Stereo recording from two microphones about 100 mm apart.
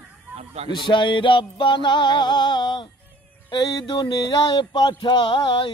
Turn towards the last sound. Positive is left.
turn(degrees=60)  # may be behind; listen again after turning